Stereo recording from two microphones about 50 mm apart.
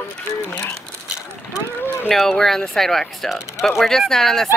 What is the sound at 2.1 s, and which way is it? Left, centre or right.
Speech, centre.